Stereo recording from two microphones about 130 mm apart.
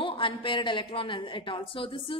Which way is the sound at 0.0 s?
40° left (ahead or behind).